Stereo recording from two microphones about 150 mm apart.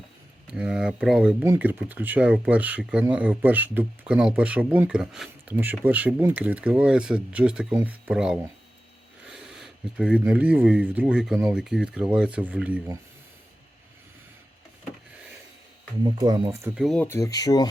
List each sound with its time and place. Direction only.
0.5 s speech: 5° right (ahead or behind)
16.0 s speech: 30° right (ahead or behind)
16.6 s speech: 15° right (ahead or behind)
16.8 s speech: 5° left (ahead or behind)
17.1 s speech: 20° left (ahead or behind)